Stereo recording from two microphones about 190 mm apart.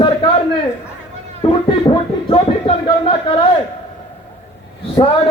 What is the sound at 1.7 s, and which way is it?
Speech, 25° left (ahead or behind).